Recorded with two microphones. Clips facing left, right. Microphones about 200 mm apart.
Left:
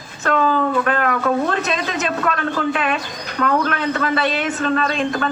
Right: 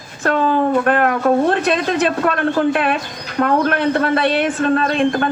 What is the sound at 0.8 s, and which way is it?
A woman's voice, 50° right (ahead or behind).